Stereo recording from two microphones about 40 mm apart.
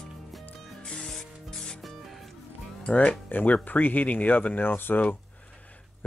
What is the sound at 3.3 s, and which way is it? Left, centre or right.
Speech, left.